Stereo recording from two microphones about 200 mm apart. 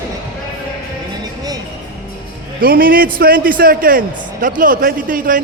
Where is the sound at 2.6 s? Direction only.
45° right (ahead or behind).